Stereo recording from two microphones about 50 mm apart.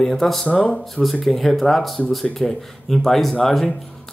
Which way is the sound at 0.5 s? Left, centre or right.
Centre.